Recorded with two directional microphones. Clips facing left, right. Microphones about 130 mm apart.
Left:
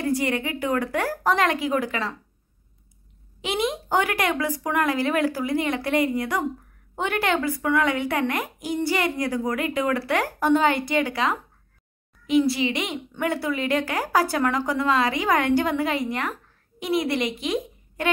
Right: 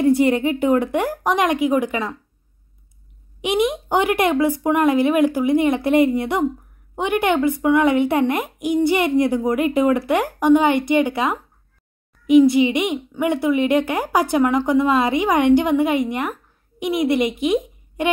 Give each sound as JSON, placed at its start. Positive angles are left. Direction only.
{"t": 0.0, "sound": "speech", "side_deg": -25}
{"t": 3.3, "sound": "a woman's voice", "side_deg": -20}